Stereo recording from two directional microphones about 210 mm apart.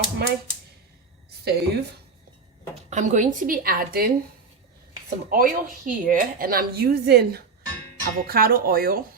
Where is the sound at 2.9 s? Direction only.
35° right (ahead or behind).